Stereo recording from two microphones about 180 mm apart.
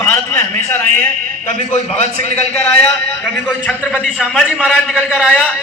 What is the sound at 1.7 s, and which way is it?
Speech, 35° left (ahead or behind).